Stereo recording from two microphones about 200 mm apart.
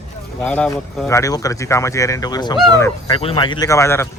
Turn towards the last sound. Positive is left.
turn(degrees=15)  # may be behind; listen again after turning